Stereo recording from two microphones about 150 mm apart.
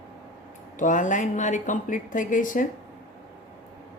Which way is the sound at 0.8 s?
60° left (ahead or behind).